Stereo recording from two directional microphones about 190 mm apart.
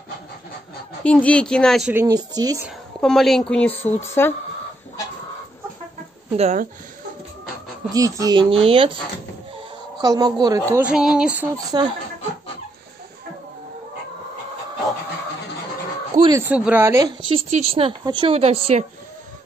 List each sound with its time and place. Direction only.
1.0 s speech: 5° left (ahead or behind)
1.9 s speech: 15° right (ahead or behind)
3.0 s speech: centre (ahead or behind)
6.3 s a woman's voice: 35° right (ahead or behind)
7.9 s speech: 20° right (ahead or behind)
9.9 s speech: 20° right (ahead or behind)
10.7 s speech: 5° right (ahead or behind)
11.5 s speech: 20° right (ahead or behind)
16.2 s speech: 15° right (ahead or behind)
17.3 s a woman's voice: 30° right (ahead or behind)